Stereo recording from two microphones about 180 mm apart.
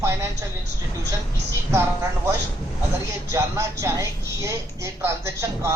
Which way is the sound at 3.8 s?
15° right (ahead or behind).